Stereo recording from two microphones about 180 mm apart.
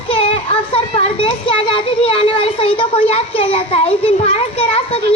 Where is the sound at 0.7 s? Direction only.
30° left (ahead or behind).